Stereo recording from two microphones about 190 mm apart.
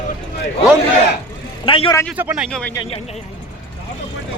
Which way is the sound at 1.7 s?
25° left (ahead or behind).